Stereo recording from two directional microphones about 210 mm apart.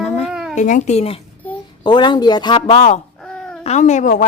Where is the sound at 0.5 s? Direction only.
35° left (ahead or behind).